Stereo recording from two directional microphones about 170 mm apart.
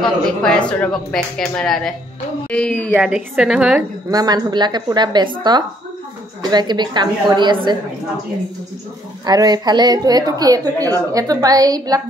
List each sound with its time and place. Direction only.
0.0 s speech: 5° left (ahead or behind)
4.1 s a woman's voice: 25° right (ahead or behind)
6.4 s a woman's voice: 25° right (ahead or behind)
9.2 s a woman's voice: 25° right (ahead or behind)